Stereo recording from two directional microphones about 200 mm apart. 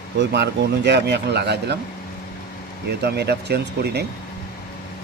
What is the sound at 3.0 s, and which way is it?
Speech, 55° right (ahead or behind).